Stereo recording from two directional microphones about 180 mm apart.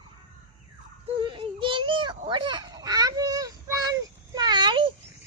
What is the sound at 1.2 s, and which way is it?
Baby cry, 30° right (ahead or behind).